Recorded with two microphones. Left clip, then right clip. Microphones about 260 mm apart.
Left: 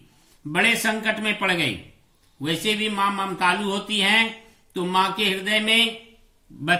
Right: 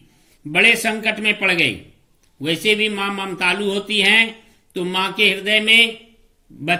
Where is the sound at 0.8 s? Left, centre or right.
Left.